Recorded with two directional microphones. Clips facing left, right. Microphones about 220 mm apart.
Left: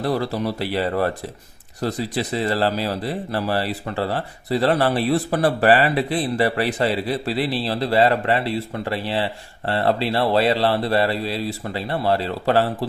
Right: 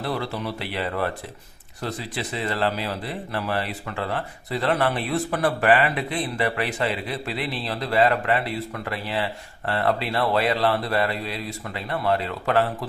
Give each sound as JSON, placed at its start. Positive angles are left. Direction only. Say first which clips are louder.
{"t": 0.0, "sound": "speech", "louder": "left 6 dB", "side_deg": 40}